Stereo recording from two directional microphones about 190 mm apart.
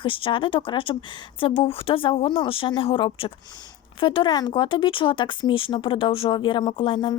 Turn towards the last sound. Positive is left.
turn(degrees=25)  # may be behind; listen again after turning